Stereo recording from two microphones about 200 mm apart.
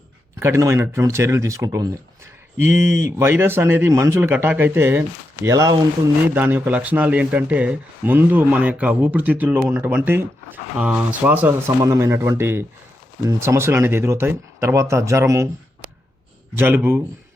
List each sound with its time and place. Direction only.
0.3 s speech: 15° right (ahead or behind)
16.6 s speech: 10° right (ahead or behind)